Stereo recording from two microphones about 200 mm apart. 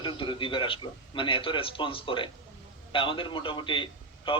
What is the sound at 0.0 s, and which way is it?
A man's voice, 25° left (ahead or behind).